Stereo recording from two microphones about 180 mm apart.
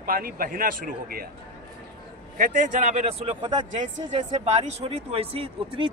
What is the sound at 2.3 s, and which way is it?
Speech, 45° right (ahead or behind).